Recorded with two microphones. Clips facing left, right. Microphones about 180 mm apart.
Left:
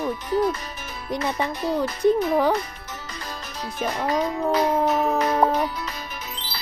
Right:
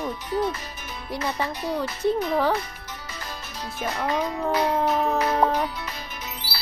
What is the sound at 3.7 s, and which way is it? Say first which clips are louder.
Speech: left 2 dB; 15° left (ahead or behind).